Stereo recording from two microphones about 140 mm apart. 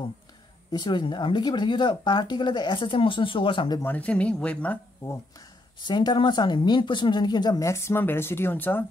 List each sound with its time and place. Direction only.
0.7 s speech: 30° left (ahead or behind)
3.8 s speech: 10° left (ahead or behind)
5.8 s speech: 35° left (ahead or behind); by 8.8 s 15° left (ahead or behind)